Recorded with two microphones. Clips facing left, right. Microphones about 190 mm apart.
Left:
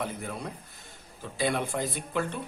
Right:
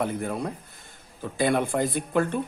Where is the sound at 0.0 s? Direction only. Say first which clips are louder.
Right 7 dB; 55° right (ahead or behind).